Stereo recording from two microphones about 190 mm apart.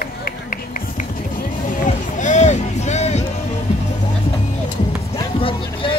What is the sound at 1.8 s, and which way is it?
Music, 40° left (ahead or behind).